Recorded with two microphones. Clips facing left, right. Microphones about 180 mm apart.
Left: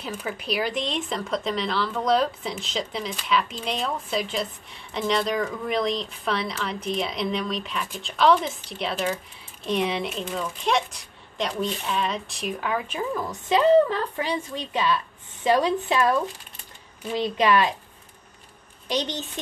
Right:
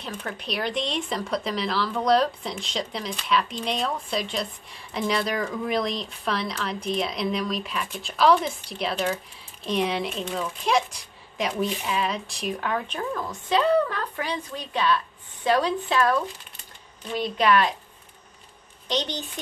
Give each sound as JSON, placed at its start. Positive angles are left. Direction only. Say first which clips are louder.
{"t": 0.0, "sound": "a woman's voice", "louder": "left 2 dB", "side_deg": 5}
{"t": 17.2, "sound": "a woman's voice", "louder": "even", "side_deg": 20}